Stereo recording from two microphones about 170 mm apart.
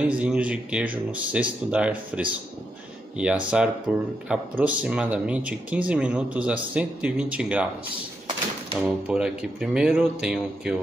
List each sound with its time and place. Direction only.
0.0 s speech: 5° right (ahead or behind)
8.8 s speech: 5° right (ahead or behind)